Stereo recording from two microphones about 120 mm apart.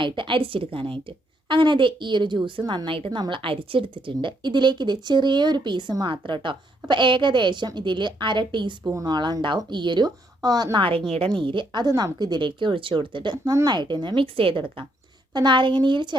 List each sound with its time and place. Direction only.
0.0 s a woman's voice: 45° right (ahead or behind)
8.8 s a woman's voice: 25° right (ahead or behind)